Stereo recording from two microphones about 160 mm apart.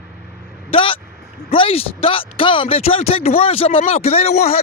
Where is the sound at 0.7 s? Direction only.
35° left (ahead or behind).